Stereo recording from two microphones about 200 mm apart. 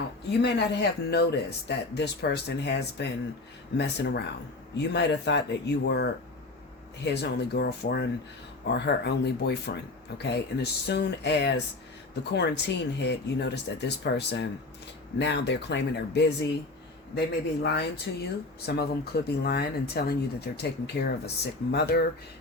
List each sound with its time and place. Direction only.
0.4 s speech: 55° left (ahead or behind)